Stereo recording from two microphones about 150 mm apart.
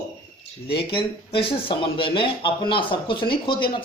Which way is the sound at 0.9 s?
35° left (ahead or behind).